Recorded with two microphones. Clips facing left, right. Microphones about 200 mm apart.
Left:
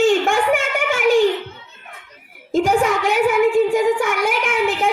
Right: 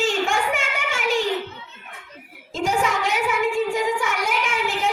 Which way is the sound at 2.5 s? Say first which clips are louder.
Left 6 dB; 55° left (ahead or behind).